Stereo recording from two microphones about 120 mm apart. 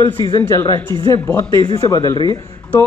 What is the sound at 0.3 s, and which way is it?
Speech, 25° left (ahead or behind).